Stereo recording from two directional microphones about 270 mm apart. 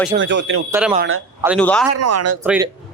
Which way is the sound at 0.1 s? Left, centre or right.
Right.